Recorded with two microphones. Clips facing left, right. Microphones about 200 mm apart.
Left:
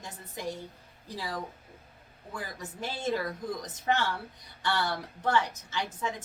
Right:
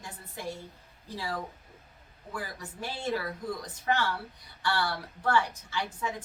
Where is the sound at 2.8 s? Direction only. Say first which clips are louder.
Left 1 dB; 20° left (ahead or behind).